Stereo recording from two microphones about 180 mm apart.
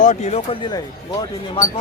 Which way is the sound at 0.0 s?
40° left (ahead or behind).